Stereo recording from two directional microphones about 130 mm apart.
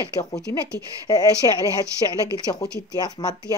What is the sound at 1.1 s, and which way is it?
Speech, 30° left (ahead or behind).